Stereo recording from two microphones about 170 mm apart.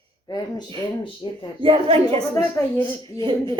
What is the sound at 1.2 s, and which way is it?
Speech, 30° left (ahead or behind).